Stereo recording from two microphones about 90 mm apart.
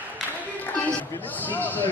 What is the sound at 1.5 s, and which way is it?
Speech, 20° left (ahead or behind).